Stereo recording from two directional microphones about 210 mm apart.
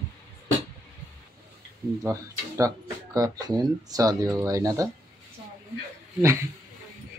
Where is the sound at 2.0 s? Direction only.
15° right (ahead or behind).